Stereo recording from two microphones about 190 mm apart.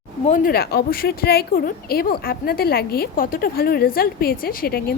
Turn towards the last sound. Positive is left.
turn(degrees=55)  # may be behind; listen again after turning